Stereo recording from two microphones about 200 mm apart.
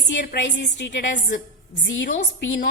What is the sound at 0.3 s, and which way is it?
A woman's voice, 60° left (ahead or behind).